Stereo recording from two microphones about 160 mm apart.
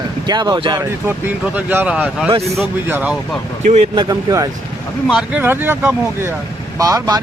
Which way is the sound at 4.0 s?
20° right (ahead or behind).